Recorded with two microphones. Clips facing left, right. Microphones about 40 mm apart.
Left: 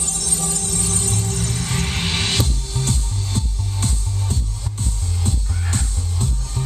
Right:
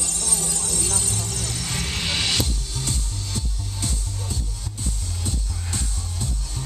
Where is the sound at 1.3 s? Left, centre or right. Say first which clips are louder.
Left 5 dB; left.